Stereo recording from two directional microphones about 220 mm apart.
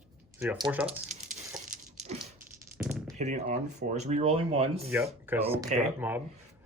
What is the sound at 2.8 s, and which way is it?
Typing, 5° right (ahead or behind).